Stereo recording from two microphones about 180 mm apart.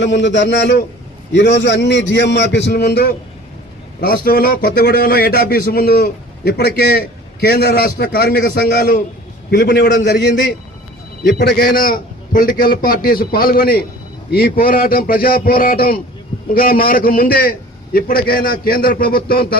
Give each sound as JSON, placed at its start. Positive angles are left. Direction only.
{"t": 0.0, "sound": "a man's voice", "side_deg": 85}
{"t": 4.0, "sound": "a man's voice", "side_deg": 55}
{"t": 9.5, "sound": "a man's voice", "side_deg": 70}